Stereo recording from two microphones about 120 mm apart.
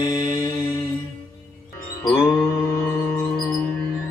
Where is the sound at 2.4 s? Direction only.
20° left (ahead or behind).